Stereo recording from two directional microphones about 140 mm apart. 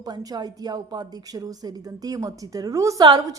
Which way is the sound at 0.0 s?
25° right (ahead or behind).